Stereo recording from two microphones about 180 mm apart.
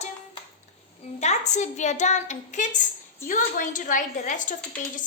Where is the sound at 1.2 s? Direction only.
40° left (ahead or behind).